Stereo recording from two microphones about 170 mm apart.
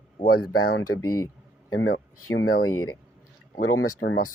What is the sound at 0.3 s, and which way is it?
Speech, 75° left (ahead or behind).